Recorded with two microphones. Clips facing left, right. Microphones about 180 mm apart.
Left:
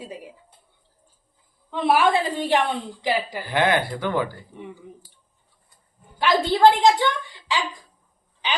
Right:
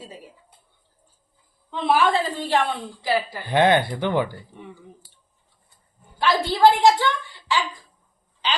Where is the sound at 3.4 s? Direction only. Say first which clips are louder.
Right 4 dB; 20° right (ahead or behind).